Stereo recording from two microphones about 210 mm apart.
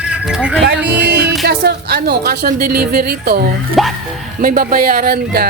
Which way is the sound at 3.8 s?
Centre (ahead or behind).